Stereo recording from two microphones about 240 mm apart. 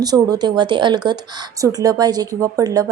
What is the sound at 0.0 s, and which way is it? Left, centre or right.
A woman's voice, centre.